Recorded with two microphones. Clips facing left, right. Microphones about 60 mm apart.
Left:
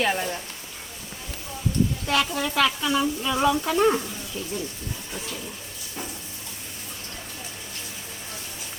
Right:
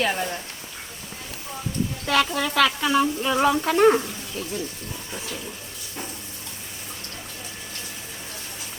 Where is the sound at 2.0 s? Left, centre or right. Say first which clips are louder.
Right 2 dB; right.